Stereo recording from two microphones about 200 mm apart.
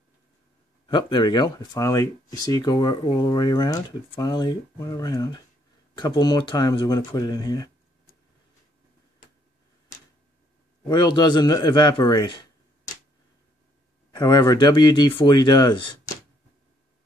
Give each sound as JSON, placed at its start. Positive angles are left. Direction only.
{"t": 0.8, "sound": "speech", "side_deg": 20}
{"t": 10.9, "sound": "speech", "side_deg": 20}
{"t": 14.1, "sound": "speech", "side_deg": 20}